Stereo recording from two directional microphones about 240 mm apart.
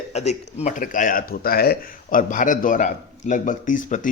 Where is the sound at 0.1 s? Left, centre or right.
Left.